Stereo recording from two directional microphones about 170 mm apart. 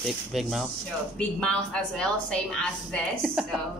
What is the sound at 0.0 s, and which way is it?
A woman's voice, centre (ahead or behind).